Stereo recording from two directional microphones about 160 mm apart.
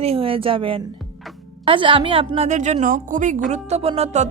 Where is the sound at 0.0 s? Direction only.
35° right (ahead or behind); by 3.4 s 50° right (ahead or behind).